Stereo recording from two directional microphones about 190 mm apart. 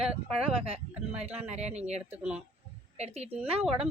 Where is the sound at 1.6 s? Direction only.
35° right (ahead or behind).